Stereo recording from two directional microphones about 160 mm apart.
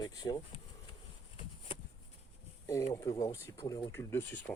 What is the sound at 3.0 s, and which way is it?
Speech, 20° left (ahead or behind).